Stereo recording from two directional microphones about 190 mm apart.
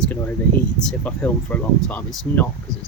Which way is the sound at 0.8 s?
5° left (ahead or behind).